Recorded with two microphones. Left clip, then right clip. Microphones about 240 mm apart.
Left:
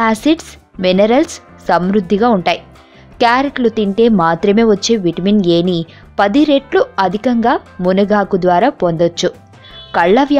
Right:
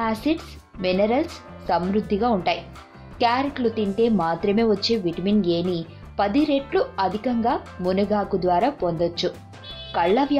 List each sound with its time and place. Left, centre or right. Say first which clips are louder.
0.0 s a woman's voice: left 11 dB; left